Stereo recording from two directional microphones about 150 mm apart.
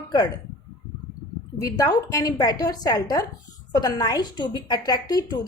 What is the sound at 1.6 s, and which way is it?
A woman's voice, 25° left (ahead or behind).